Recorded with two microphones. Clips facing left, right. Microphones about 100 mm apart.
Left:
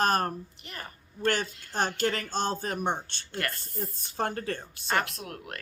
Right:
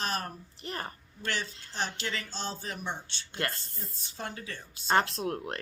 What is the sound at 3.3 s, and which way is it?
Speech, 25° right (ahead or behind).